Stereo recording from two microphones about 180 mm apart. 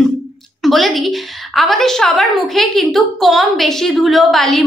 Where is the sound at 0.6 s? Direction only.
Centre (ahead or behind).